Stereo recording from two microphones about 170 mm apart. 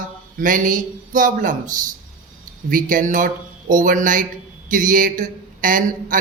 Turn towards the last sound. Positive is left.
turn(degrees=-55)  # may be behind; listen again after turning